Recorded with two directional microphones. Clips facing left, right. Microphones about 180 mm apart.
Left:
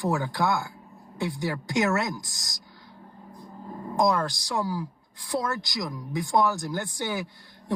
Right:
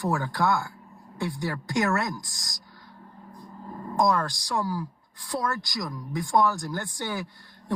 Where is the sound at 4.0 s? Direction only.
20° left (ahead or behind).